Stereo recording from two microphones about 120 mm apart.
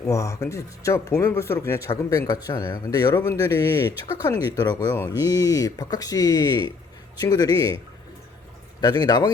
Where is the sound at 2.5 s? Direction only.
35° left (ahead or behind).